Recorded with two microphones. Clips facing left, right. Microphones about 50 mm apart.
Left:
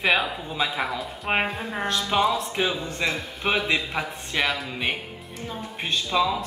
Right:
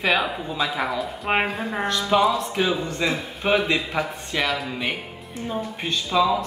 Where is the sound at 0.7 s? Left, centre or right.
Centre.